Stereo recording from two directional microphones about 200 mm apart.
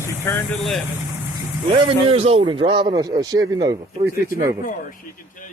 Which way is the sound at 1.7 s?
25° right (ahead or behind).